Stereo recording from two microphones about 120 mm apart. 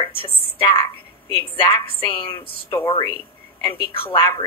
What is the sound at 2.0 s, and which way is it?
A woman's voice, 45° left (ahead or behind).